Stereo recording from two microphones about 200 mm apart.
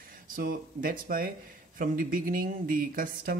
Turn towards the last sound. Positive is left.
turn(degrees=-45)  # may be behind; listen again after turning